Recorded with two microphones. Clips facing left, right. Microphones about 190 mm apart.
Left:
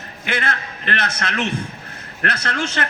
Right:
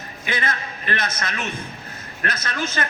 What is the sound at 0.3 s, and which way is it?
A man's voice, 70° left (ahead or behind).